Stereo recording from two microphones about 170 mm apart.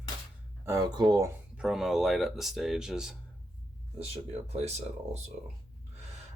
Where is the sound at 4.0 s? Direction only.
40° right (ahead or behind).